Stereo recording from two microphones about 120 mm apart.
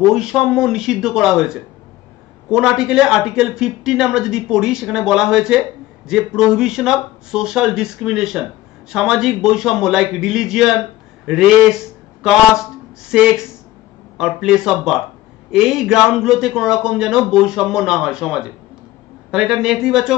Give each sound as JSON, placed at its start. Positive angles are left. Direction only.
{"t": 0.0, "sound": "a man's voice", "side_deg": -5}